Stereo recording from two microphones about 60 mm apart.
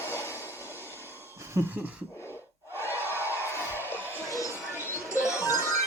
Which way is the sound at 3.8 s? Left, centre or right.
Left.